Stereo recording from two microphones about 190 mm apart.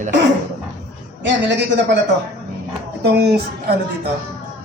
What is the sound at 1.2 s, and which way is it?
Speech, 65° right (ahead or behind).